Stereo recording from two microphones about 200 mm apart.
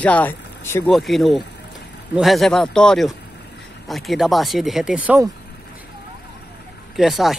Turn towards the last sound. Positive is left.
turn(degrees=0)  # may be behind; listen again after turning